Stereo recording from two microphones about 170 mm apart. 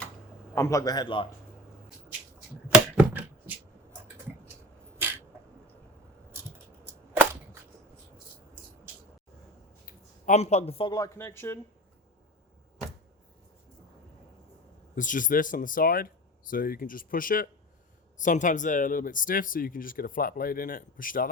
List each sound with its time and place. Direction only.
0.5 s a man's voice: 15° left (ahead or behind)
2.7 s a sound: 5° right (ahead or behind)
9.8 s speech: 45° left (ahead or behind); by 11.6 s 15° left (ahead or behind)
14.9 s speech: 50° left (ahead or behind)